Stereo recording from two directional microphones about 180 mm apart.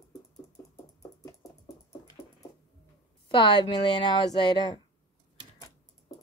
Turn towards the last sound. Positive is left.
turn(degrees=25)  # may be behind; listen again after turning